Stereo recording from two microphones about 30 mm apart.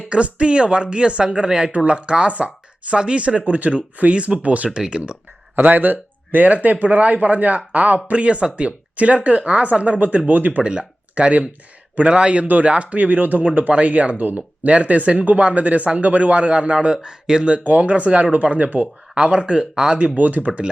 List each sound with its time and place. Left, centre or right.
0.1 s a man's voice: right
1.5 s speech: right
1.7 s a man's voice: right
4.9 s a man's voice: right
5.6 s speech: right
6.8 s speech: right
8.1 s speech: right
9.8 s speech: right
10.6 s speech: right
13.7 s speech: right
14.2 s a man's voice: right
17.6 s speech: right
19.3 s a man's voice: right
20.1 s speech: right